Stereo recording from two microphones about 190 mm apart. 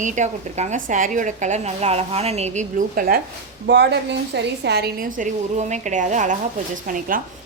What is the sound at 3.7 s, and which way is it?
A woman's voice, 65° right (ahead or behind).